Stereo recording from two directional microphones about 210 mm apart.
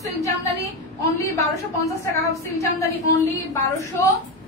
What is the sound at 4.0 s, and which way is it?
Speech, 15° left (ahead or behind).